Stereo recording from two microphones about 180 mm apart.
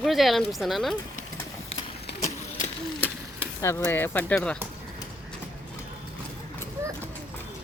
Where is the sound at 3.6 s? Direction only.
15° left (ahead or behind).